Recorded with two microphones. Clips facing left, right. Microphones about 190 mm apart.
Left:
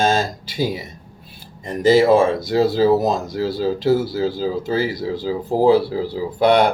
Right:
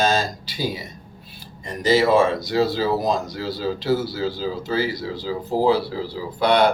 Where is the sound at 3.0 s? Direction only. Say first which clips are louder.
Left 3 dB; 50° left (ahead or behind).